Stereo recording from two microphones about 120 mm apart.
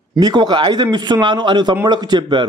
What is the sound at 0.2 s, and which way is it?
A man's voice, 40° right (ahead or behind).